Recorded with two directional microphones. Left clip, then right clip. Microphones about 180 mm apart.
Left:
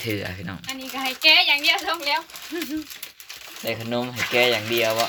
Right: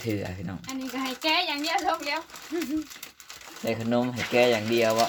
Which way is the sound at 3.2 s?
55° right (ahead or behind).